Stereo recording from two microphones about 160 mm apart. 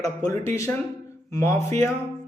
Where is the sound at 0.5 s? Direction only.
15° left (ahead or behind).